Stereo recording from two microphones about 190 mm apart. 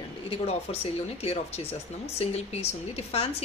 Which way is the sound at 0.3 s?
30° left (ahead or behind).